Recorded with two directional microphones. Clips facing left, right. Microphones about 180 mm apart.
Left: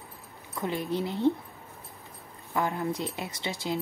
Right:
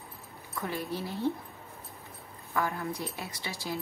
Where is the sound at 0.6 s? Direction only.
20° left (ahead or behind).